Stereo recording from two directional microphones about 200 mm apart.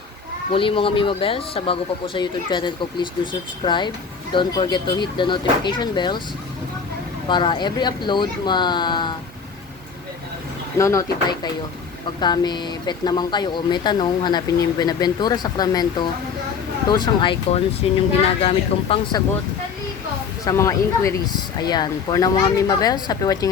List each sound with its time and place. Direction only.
0.5 s speech: 25° left (ahead or behind)
7.3 s speech: 25° left (ahead or behind)
10.8 s speech: 15° left (ahead or behind)
20.4 s speech: 15° left (ahead or behind)